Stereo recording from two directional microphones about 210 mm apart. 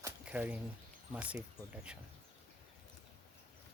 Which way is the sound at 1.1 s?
5° right (ahead or behind).